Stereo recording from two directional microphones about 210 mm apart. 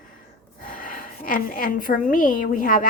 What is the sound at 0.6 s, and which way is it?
A woman's voice, 40° left (ahead or behind).